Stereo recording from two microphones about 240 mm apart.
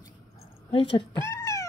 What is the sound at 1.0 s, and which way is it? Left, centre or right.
Cat, centre.